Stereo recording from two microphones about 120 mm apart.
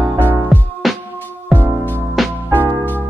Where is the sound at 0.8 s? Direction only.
Centre (ahead or behind).